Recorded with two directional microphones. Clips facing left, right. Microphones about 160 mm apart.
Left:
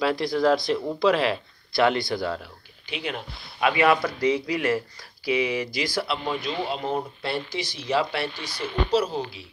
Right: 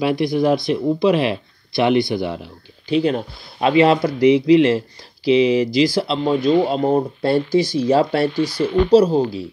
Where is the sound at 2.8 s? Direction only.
35° right (ahead or behind).